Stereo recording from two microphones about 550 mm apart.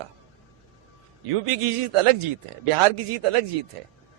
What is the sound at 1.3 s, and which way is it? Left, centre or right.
A man's voice, right.